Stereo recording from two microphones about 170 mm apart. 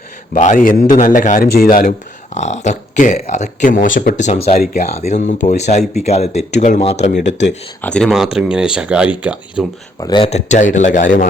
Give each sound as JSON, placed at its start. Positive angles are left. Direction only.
{"t": 0.3, "sound": "speech", "side_deg": 50}
{"t": 4.5, "sound": "speech", "side_deg": 60}
{"t": 4.9, "sound": "speech", "side_deg": 40}
{"t": 7.8, "sound": "speech", "side_deg": 5}
{"t": 10.0, "sound": "speech", "side_deg": 25}
{"t": 10.2, "sound": "speech", "side_deg": 45}